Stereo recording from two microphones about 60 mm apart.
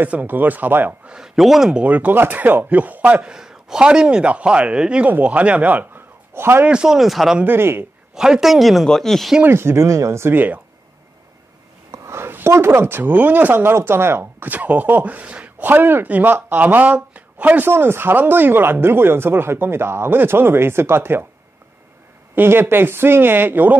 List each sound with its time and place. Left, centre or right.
0.0 s speech: right
1.0 s a man's voice: centre
1.7 s speech: right
3.3 s a man's voice: centre; by 6.0 s right
6.3 s a man's voice: right
6.7 s a man's voice: centre
7.4 s speech: right
8.1 s a woman's voice: centre
9.5 s speech: right
10.3 s speech: right
11.9 s speech: right
17.6 s speech: right
22.3 s speech: right